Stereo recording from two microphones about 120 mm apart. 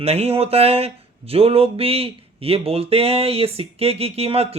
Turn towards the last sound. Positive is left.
turn(degrees=-55)  # may be behind; listen again after turning